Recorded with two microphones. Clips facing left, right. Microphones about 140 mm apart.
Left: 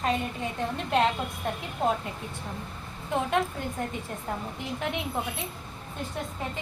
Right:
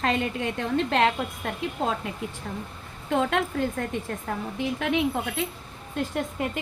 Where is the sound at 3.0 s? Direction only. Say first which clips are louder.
Right 2 dB; 90° right.